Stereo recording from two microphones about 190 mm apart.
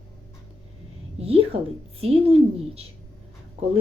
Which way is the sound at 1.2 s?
30° right (ahead or behind).